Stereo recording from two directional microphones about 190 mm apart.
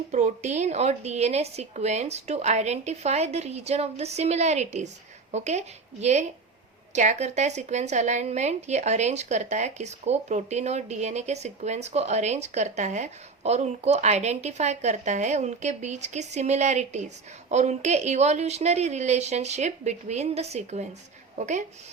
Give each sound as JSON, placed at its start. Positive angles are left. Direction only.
{"t": 0.1, "sound": "a woman's voice", "side_deg": -40}